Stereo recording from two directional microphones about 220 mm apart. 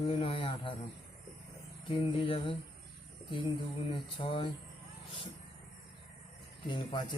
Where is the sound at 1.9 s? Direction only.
25° left (ahead or behind).